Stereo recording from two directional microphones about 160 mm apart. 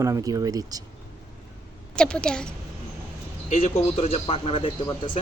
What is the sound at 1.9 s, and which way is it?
Speech, 5° left (ahead or behind).